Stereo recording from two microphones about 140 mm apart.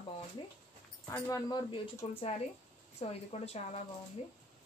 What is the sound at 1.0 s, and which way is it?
Speech, 25° left (ahead or behind).